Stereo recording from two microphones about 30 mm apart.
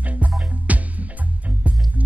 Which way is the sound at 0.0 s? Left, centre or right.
Right.